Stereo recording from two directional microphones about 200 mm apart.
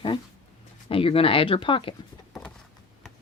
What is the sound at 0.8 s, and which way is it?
Speech, 25° left (ahead or behind).